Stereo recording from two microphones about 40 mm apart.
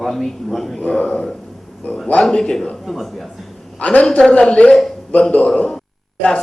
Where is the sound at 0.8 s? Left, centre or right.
Left.